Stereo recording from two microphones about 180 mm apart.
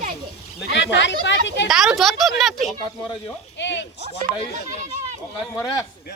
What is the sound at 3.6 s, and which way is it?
Speech, 85° left.